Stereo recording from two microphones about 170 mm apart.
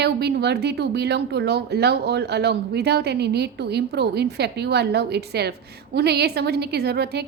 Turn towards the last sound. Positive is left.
turn(degrees=-70)  # may be behind; listen again after turning